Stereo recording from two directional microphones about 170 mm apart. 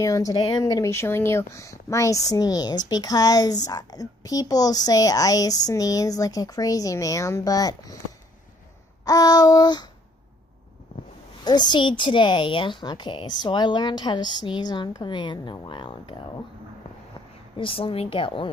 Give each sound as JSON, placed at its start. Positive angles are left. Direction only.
{"t": 0.0, "sound": "speech", "side_deg": 20}
{"t": 9.0, "sound": "speech", "side_deg": 20}
{"t": 11.4, "sound": "speech", "side_deg": 25}
{"t": 17.6, "sound": "a woman's voice", "side_deg": 30}